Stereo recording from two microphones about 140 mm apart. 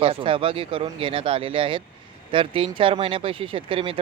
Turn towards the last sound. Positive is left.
turn(degrees=-40)  # may be behind; listen again after turning